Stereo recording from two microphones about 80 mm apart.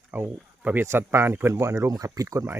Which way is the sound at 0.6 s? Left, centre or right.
Centre.